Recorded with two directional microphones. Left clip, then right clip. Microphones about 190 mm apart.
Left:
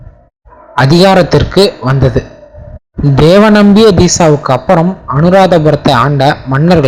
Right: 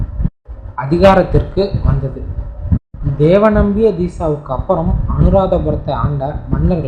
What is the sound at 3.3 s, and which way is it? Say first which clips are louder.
Speech: left 5 dB; 45° left (ahead or behind).